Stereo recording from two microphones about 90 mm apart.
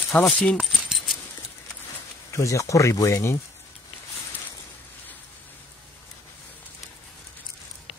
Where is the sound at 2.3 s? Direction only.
35° left (ahead or behind).